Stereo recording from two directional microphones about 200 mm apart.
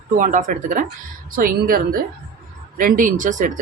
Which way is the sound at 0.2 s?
40° right (ahead or behind).